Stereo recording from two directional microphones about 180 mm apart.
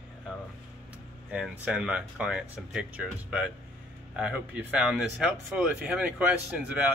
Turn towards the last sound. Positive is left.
turn(degrees=-5)  # may be behind; listen again after turning